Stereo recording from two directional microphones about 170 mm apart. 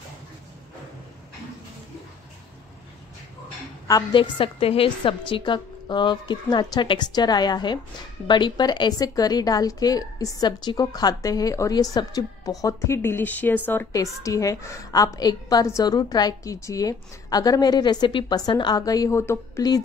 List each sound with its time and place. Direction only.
3.8 s a woman's voice: 25° left (ahead or behind)